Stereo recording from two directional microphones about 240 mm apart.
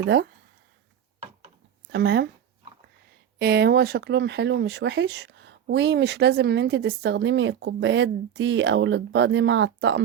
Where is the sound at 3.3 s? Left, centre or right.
Right.